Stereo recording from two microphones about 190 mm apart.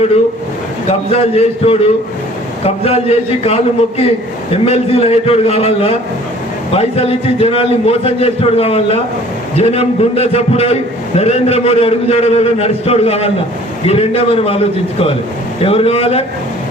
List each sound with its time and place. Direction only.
0.9 s a man's voice: 30° left (ahead or behind)